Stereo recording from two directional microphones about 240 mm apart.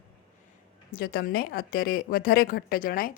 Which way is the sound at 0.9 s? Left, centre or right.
Left.